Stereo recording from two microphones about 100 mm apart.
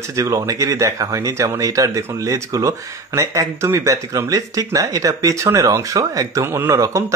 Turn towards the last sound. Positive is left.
turn(degrees=-30)  # may be behind; listen again after turning